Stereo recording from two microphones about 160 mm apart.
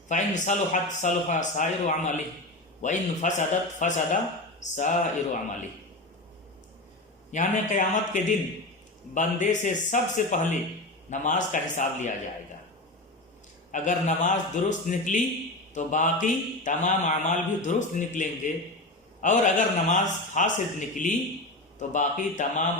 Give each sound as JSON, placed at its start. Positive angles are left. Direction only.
{"t": 0.1, "sound": "a man's voice", "side_deg": 50}
{"t": 7.3, "sound": "a man's voice", "side_deg": 50}
{"t": 13.7, "sound": "a man's voice", "side_deg": 50}